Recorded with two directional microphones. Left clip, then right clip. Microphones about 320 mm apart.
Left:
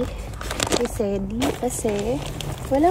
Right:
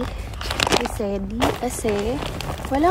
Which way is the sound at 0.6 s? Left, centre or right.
Centre.